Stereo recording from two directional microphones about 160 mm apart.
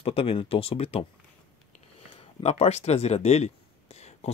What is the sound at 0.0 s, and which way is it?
Speech, 35° left (ahead or behind).